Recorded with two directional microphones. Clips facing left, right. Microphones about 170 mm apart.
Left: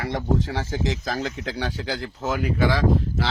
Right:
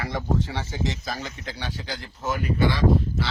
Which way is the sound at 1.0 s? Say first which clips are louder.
Left 5 dB; 90° left.